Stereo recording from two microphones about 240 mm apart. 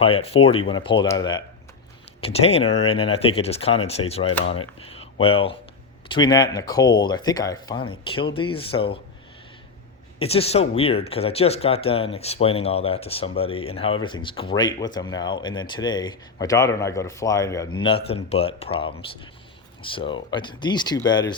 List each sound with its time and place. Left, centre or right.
0.0 s speech: left
4.4 s speech: left
5.2 s speech: left
10.2 s speech: left